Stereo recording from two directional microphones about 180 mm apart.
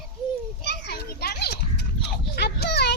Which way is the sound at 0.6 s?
70° left (ahead or behind).